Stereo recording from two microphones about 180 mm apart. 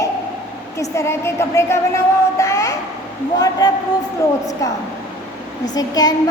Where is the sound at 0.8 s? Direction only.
15° left (ahead or behind).